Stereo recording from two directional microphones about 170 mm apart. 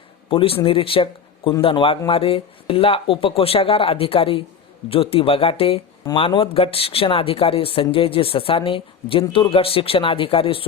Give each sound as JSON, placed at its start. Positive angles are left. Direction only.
{"t": 0.3, "sound": "speech", "side_deg": 35}